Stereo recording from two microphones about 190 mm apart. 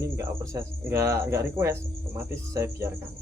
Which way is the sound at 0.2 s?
15° right (ahead or behind).